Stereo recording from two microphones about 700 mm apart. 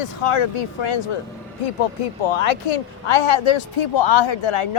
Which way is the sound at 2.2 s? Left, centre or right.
Left.